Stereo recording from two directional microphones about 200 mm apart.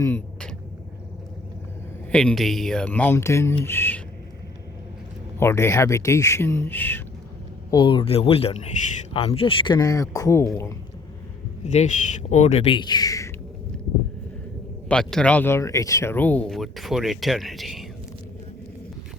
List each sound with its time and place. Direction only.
0.0 s vehicle: 5° left (ahead or behind)
2.1 s speech: centre (ahead or behind)
5.4 s speech: 15° left (ahead or behind)
7.7 s speech: 25° left (ahead or behind)
11.6 s speech: 35° left (ahead or behind); by 13.3 s 15° left (ahead or behind)
14.8 s speech: 5° left (ahead or behind)